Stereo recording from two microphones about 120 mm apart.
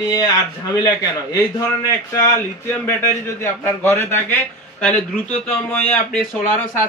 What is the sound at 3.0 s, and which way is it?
A man's voice, 20° left (ahead or behind).